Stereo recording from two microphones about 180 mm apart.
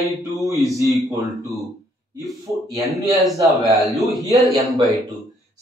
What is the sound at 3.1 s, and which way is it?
Speech, centre (ahead or behind).